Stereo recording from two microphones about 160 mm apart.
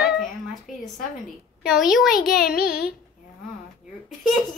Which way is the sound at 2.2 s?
70° left (ahead or behind).